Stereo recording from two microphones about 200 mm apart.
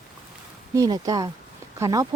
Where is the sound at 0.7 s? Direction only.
20° right (ahead or behind).